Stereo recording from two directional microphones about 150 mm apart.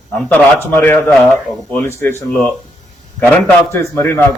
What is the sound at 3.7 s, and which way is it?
Speech, 15° left (ahead or behind).